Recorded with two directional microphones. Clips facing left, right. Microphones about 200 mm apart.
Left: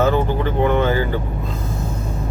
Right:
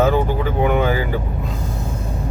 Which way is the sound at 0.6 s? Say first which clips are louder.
Left 1 dB; 10° right (ahead or behind).